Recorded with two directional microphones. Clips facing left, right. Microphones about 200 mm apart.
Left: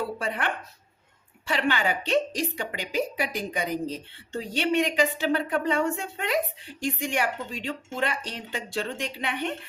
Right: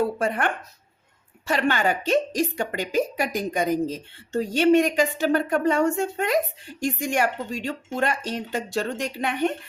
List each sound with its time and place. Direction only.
0.2 s a woman's voice: 50° right (ahead or behind)